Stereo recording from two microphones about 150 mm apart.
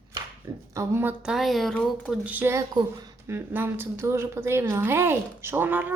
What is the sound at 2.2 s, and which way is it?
A woman's voice, 15° right (ahead or behind).